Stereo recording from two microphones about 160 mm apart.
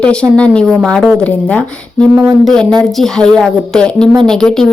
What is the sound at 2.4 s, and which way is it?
A woman's voice, 5° left (ahead or behind).